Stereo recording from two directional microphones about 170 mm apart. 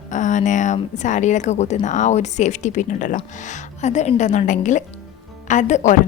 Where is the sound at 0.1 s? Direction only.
45° left (ahead or behind).